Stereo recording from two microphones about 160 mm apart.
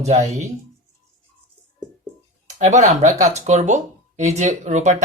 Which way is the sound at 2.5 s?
45° right (ahead or behind).